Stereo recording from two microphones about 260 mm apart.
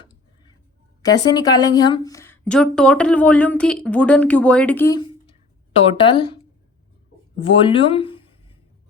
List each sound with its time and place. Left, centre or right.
1.0 s a woman's voice: centre
7.3 s speech: left